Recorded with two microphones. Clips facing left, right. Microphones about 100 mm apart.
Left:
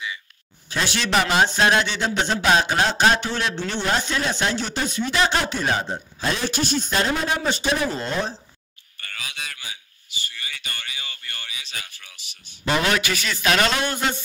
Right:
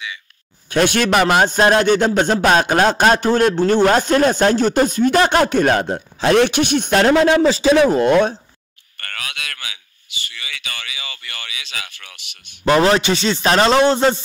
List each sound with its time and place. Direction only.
0.7 s a man's voice: 55° right (ahead or behind)
12.7 s a man's voice: 35° right (ahead or behind)